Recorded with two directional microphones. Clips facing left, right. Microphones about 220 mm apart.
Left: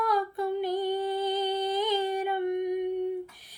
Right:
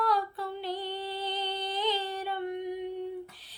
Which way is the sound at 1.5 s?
45° left (ahead or behind).